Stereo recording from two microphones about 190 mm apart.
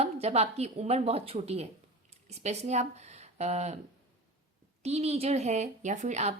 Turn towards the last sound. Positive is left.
turn(degrees=-35)  # may be behind; listen again after turning